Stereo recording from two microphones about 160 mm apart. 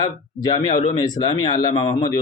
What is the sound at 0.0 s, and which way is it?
Speech, 25° left (ahead or behind).